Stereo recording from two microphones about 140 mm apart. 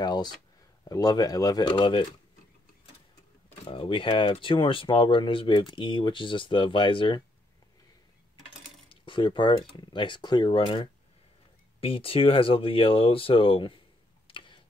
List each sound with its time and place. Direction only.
0.0 s a sound: 30° left (ahead or behind)
0.8 s speech: 25° left (ahead or behind)
3.6 s speech: 40° left (ahead or behind)
8.8 s cutlery: 35° left (ahead or behind)
9.6 s speech: 35° left (ahead or behind)
14.2 s tick: 35° left (ahead or behind)